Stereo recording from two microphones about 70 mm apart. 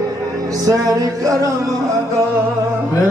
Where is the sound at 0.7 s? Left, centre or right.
Right.